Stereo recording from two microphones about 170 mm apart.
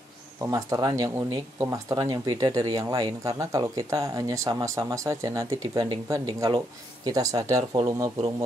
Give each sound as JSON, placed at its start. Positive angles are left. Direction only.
{"t": 0.4, "sound": "speech", "side_deg": -20}